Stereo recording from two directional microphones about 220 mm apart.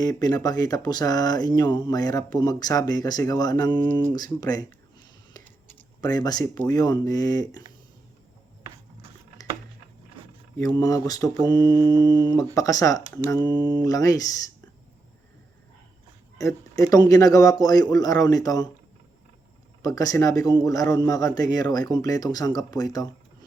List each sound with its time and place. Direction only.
0.0 s speech: 15° left (ahead or behind)
6.0 s speech: 15° left (ahead or behind)
10.6 s speech: 15° left (ahead or behind)
16.4 s speech: 15° left (ahead or behind)
19.8 s speech: 15° left (ahead or behind)